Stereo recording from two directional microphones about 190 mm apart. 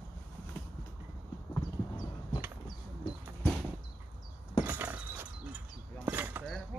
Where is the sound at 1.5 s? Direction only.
20° left (ahead or behind).